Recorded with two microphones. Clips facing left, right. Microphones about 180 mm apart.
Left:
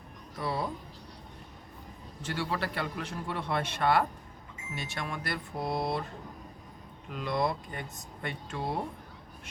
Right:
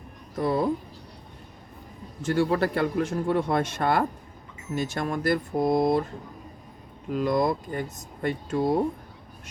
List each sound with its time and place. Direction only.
0.3 s a man's voice: 50° right (ahead or behind)
2.2 s a man's voice: 45° right (ahead or behind)
7.1 s speech: 40° right (ahead or behind)